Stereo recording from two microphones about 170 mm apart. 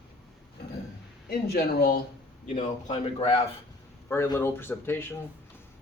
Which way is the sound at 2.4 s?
40° left (ahead or behind).